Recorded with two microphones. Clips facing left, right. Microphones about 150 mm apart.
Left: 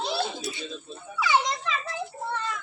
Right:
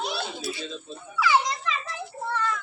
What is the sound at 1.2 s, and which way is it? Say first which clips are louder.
Children playing: right 1 dB; 20° left (ahead or behind).